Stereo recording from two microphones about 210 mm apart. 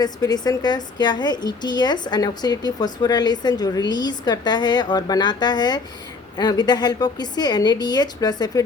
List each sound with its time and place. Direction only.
0.0 s a woman's voice: 20° left (ahead or behind)